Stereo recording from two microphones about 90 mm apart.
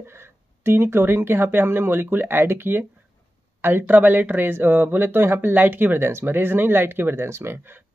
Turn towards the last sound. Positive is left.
turn(degrees=-25)  # may be behind; listen again after turning